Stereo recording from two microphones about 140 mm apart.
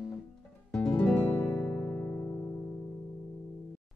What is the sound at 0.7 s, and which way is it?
Music, 5° left (ahead or behind).